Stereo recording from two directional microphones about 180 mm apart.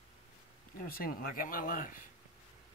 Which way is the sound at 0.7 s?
55° left (ahead or behind).